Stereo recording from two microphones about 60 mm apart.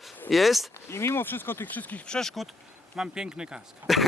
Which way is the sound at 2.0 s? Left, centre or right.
Centre.